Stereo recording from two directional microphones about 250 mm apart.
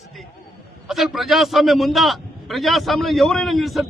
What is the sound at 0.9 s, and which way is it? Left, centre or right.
A man's voice, centre.